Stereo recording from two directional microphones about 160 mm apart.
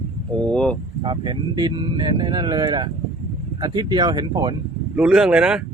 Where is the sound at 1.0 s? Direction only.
30° right (ahead or behind).